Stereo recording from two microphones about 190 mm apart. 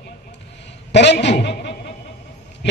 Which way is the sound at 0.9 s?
65° left (ahead or behind).